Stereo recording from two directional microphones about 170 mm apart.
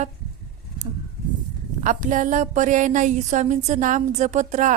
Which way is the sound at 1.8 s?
50° right (ahead or behind).